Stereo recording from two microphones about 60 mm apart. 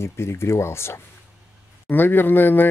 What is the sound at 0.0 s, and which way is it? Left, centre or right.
Speech, left.